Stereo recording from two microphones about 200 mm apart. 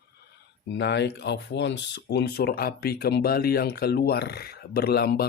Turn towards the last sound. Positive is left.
turn(degrees=50)  # may be behind; listen again after turning